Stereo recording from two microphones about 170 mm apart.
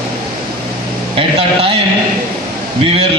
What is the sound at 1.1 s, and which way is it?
Speech, 35° right (ahead or behind).